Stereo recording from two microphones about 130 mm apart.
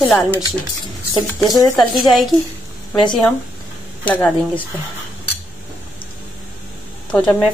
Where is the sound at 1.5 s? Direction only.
30° left (ahead or behind).